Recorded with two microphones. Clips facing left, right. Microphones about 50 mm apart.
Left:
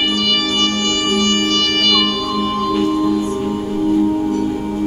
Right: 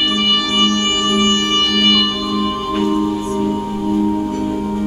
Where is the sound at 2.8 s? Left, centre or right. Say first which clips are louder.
Right 1 dB; right.